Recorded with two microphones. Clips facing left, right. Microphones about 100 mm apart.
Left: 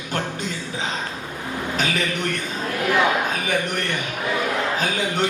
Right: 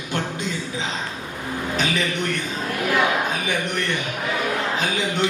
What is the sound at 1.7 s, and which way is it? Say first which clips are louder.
Speech: right 1 dB; 45° left (ahead or behind).